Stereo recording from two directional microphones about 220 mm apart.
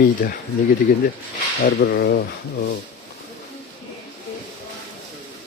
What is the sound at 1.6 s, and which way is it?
Speech, 45° left (ahead or behind).